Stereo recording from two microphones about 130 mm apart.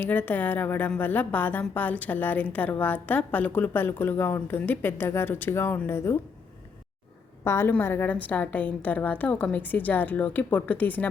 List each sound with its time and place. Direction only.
0.0 s a woman's voice: 15° left (ahead or behind)
7.4 s a woman's voice: 20° left (ahead or behind)